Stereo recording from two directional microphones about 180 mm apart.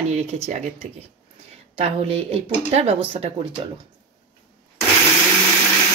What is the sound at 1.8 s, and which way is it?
Speech, 35° right (ahead or behind).